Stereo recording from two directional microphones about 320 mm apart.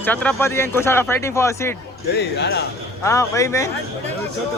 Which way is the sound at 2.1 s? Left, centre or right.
Left.